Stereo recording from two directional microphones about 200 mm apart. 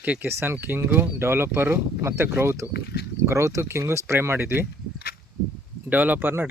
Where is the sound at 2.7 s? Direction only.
55° left (ahead or behind).